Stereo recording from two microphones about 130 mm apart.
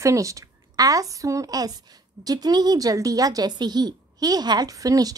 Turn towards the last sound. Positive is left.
turn(degrees=-25)  # may be behind; listen again after turning